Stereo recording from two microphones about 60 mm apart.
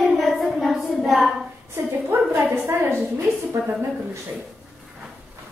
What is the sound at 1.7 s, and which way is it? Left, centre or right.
Speech, right.